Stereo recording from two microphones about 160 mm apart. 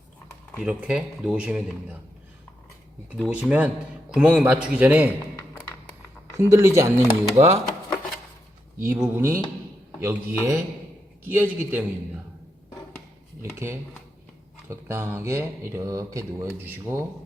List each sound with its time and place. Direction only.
0.6 s speech: 10° right (ahead or behind)
3.2 s speech: 5° right (ahead or behind)
5.4 s tap: 15° left (ahead or behind)
6.3 s speech: 15° right (ahead or behind)
7.3 s speech: 40° right (ahead or behind)
8.8 s speech: 15° right (ahead or behind)
13.4 s speech: 15° right (ahead or behind)